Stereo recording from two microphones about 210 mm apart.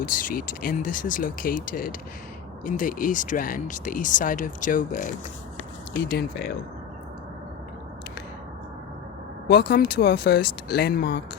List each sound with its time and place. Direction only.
0.0 s speech: 40° left (ahead or behind)
9.5 s speech: 50° left (ahead or behind)